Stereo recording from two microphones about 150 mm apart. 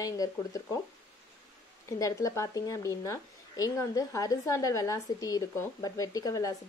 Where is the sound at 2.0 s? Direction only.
20° left (ahead or behind).